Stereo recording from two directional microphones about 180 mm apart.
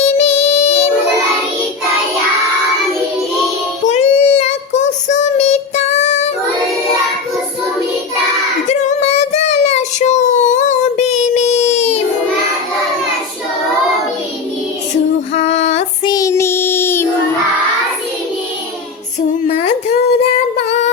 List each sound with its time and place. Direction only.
0.0 s child singing: 35° left (ahead or behind)
3.8 s child singing: 40° left (ahead or behind)
8.6 s child singing: 35° left (ahead or behind)
15.4 s a sound: 40° left (ahead or behind)
16.0 s child singing: 20° left (ahead or behind)